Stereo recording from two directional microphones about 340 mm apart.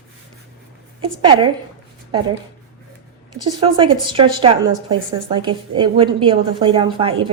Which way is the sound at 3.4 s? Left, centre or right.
Centre.